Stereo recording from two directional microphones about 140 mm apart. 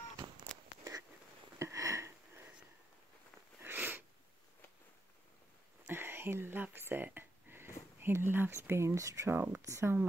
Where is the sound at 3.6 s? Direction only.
15° right (ahead or behind).